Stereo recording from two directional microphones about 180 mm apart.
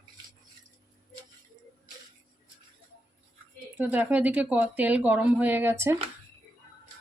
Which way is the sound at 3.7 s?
10° right (ahead or behind).